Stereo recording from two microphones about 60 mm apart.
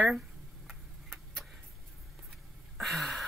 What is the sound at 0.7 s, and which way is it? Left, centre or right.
Tick-tock, centre.